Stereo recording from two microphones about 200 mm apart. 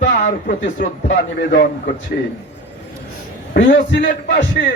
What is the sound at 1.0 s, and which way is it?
A man's voice, 65° left (ahead or behind).